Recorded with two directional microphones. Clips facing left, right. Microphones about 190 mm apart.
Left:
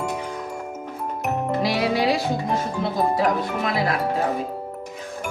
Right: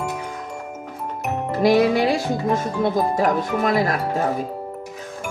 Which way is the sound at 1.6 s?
50° right (ahead or behind).